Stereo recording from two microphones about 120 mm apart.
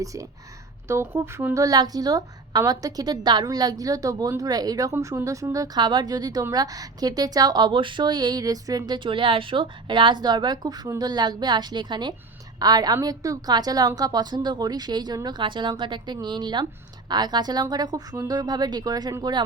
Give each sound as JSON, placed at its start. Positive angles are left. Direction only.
{"t": 0.0, "sound": "speech", "side_deg": -30}
{"t": 1.6, "sound": "a woman's voice", "side_deg": -35}
{"t": 9.0, "sound": "a woman's voice", "side_deg": -45}